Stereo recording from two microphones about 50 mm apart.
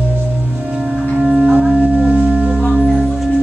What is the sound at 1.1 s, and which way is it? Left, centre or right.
Music, centre.